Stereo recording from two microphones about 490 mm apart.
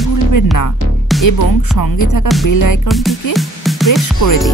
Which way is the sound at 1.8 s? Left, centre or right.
Left.